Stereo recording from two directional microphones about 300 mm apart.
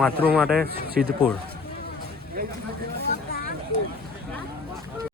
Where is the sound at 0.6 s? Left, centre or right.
Right.